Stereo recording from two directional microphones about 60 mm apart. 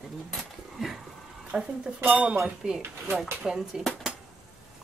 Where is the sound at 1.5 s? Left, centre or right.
Centre.